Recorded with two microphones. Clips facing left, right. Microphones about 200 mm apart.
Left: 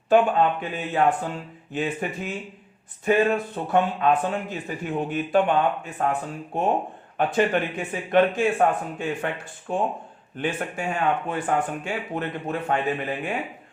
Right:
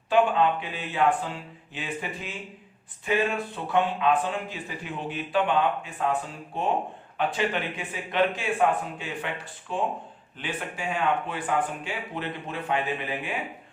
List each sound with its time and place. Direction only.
0.1 s speech: 45° left (ahead or behind)